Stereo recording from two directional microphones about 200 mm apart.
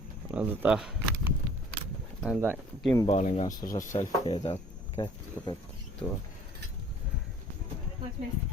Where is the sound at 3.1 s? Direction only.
35° left (ahead or behind).